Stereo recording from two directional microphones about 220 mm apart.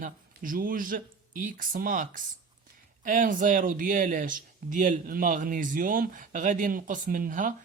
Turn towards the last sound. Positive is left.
turn(degrees=-35)  # may be behind; listen again after turning